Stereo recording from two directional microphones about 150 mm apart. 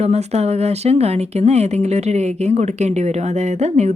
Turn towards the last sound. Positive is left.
turn(degrees=-50)  # may be behind; listen again after turning